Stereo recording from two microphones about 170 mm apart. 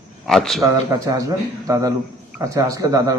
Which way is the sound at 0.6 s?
20° right (ahead or behind).